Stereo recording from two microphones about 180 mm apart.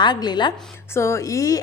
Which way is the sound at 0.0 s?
25° left (ahead or behind).